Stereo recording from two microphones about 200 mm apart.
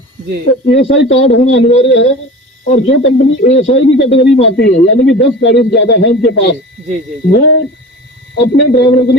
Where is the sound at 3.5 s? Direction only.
30° left (ahead or behind).